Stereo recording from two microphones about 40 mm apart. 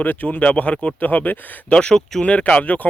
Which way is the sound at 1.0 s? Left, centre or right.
Left.